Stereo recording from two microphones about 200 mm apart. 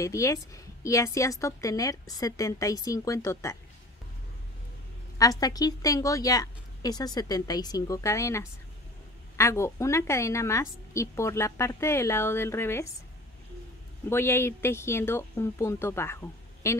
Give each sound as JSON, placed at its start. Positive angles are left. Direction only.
{"t": 0.0, "sound": "a woman's voice", "side_deg": 15}
{"t": 5.2, "sound": "a woman's voice", "side_deg": 20}
{"t": 14.0, "sound": "a woman's voice", "side_deg": 10}